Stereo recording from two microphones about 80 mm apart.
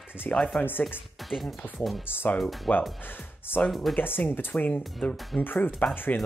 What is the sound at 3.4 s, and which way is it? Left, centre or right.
Speech, left.